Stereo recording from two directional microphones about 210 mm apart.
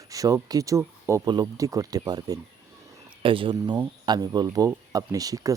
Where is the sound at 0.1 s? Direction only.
15° right (ahead or behind).